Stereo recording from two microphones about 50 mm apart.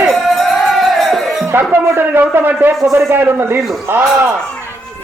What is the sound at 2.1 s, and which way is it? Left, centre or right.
A man's voice, right.